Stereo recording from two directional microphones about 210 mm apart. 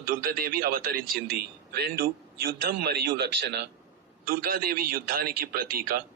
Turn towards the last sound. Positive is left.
turn(degrees=-45)  # may be behind; listen again after turning